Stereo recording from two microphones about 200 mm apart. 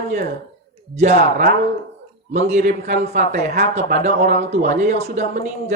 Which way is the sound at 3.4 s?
55° right (ahead or behind).